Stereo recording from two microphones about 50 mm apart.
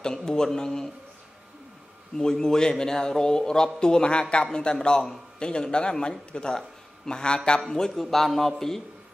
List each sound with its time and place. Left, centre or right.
0.0 s a man's voice: centre
2.1 s a man's voice: centre